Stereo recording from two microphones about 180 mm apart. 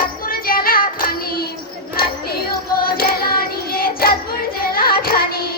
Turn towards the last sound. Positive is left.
turn(degrees=55)  # may be behind; listen again after turning